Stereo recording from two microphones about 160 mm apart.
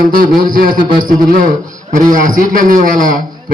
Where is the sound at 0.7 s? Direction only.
30° right (ahead or behind).